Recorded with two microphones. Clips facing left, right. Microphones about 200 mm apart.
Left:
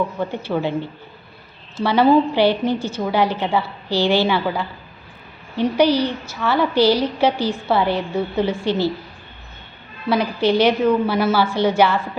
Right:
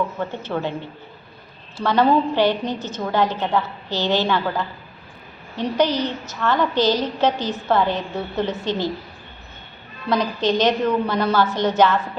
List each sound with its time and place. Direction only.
0.2 s a woman's voice: 10° left (ahead or behind)
1.8 s a woman's voice: 10° left (ahead or behind)
5.6 s a woman's voice: 10° left (ahead or behind)
10.1 s a woman's voice: 10° left (ahead or behind)